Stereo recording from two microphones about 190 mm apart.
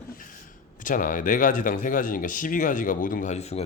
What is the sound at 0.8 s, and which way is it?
Speech, 45° left (ahead or behind).